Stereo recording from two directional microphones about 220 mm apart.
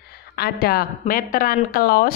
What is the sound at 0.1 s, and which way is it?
A woman's voice, 45° left (ahead or behind).